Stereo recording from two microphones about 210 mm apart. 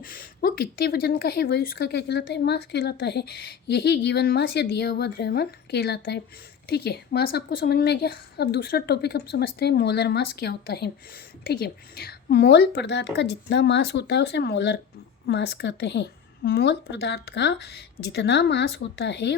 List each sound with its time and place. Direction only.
0.0 s speech: 45° left (ahead or behind)